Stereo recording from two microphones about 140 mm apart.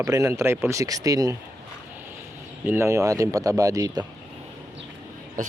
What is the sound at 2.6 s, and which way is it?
Speech, 20° right (ahead or behind).